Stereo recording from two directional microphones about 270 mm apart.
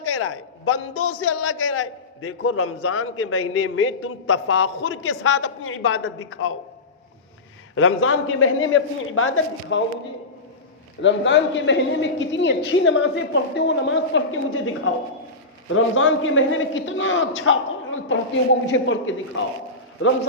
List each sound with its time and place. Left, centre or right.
0.0 s a man's voice: left
7.8 s a man's voice: left
11.0 s a man's voice: left